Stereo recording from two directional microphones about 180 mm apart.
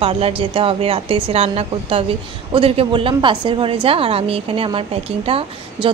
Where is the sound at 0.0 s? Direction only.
30° right (ahead or behind).